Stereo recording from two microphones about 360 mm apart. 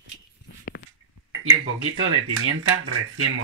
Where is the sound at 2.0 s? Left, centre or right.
Right.